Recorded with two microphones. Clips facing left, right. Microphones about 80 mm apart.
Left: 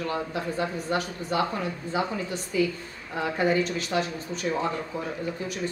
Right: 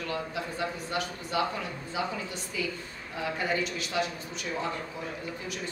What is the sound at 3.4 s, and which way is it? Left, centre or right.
Speech, left.